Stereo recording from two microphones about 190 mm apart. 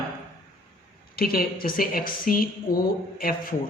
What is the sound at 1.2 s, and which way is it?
Speech, 50° left (ahead or behind).